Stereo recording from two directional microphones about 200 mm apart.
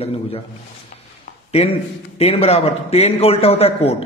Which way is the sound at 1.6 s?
30° left (ahead or behind).